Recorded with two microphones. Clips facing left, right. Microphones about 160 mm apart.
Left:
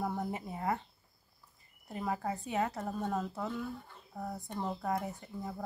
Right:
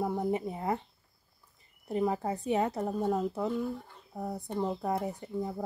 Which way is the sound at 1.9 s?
25° right (ahead or behind).